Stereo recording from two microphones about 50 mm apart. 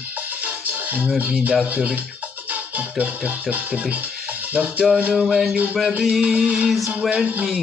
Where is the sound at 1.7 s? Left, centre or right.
Right.